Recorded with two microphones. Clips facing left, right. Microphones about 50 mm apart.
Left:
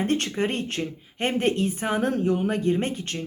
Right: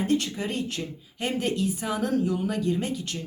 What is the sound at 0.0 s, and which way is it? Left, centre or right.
Speech, left.